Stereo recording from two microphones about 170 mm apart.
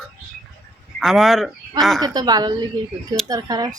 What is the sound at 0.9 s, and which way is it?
Speech, centre (ahead or behind).